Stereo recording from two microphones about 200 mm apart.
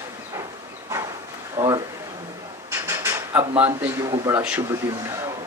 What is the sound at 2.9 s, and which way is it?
Drawer open or close, 10° right (ahead or behind).